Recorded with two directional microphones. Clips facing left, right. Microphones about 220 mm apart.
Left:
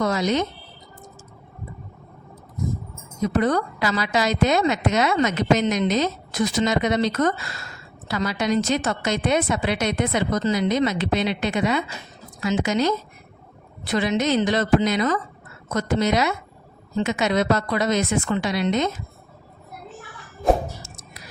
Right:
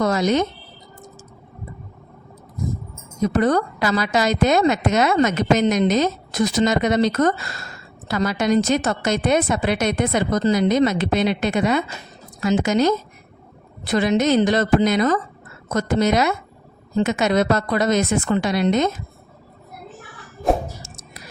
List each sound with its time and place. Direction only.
0.0 s speech: 45° right (ahead or behind)
3.3 s speech: 45° right (ahead or behind)